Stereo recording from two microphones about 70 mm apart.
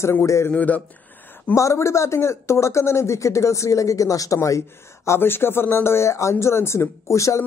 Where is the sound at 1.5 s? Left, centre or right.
Left.